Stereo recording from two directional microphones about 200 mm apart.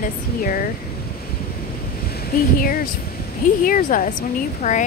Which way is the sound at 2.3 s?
45° left (ahead or behind).